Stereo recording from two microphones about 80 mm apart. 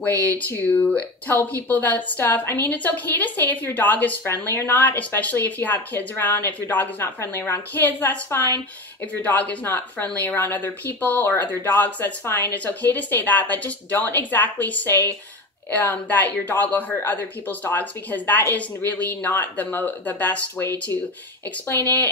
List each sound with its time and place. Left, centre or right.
0.0 s speech: left
7.2 s a woman's voice: left
7.8 s speech: left